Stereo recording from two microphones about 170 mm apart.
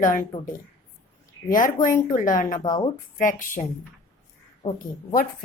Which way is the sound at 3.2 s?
50° left (ahead or behind).